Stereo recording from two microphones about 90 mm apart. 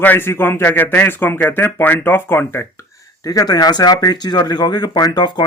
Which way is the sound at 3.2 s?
40° left (ahead or behind).